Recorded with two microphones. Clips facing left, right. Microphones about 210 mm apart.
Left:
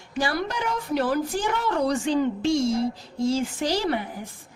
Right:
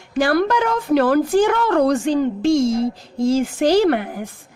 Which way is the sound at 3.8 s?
70° right (ahead or behind).